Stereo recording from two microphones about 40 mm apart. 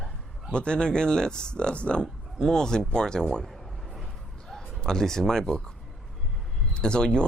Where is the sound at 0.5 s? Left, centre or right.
Left.